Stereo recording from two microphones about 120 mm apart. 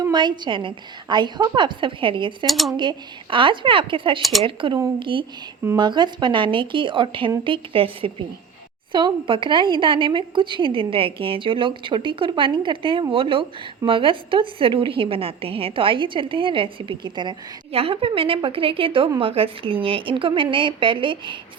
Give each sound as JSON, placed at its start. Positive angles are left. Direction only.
{"t": 0.0, "sound": "a woman's voice", "side_deg": -40}
{"t": 2.5, "sound": "speech", "side_deg": 0}
{"t": 2.7, "sound": "a woman's voice", "side_deg": -45}
{"t": 4.2, "sound": "speech", "side_deg": 0}
{"t": 4.4, "sound": "a woman's voice", "side_deg": -45}